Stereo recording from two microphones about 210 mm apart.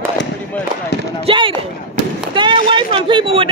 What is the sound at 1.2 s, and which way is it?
Speech, 25° right (ahead or behind).